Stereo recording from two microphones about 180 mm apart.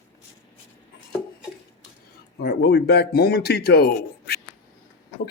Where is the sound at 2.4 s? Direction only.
65° left (ahead or behind).